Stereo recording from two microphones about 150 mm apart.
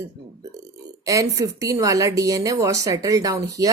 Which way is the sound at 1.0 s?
20° right (ahead or behind).